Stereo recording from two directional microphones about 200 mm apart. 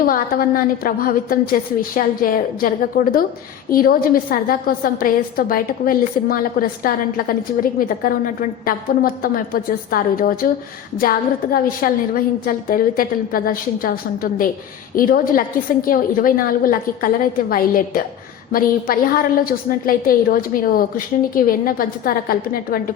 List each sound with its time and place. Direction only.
0.0 s a woman's voice: 45° left (ahead or behind)
11.5 s a woman's voice: 45° left (ahead or behind)